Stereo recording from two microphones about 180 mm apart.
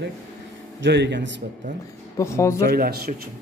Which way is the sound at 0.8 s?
80° right.